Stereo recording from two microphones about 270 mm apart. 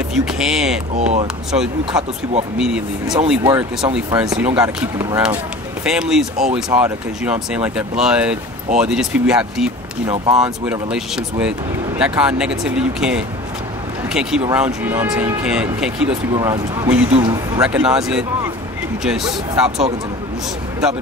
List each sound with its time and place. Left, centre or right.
0.1 s speech: centre
0.9 s speech: right
1.2 s speech: centre
1.9 s speech: centre
2.5 s speech: centre
17.6 s speech: centre